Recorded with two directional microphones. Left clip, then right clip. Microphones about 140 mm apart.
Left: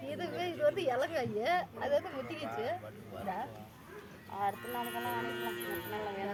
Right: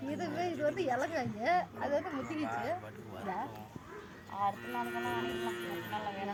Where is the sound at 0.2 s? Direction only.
50° left (ahead or behind).